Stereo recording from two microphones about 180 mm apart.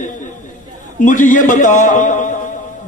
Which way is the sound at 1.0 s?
45° left (ahead or behind).